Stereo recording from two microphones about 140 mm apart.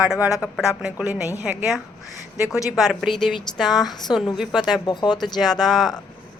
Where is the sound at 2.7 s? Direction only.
Centre (ahead or behind).